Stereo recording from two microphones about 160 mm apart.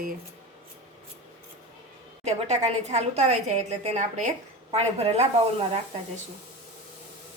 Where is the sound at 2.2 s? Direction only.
45° right (ahead or behind).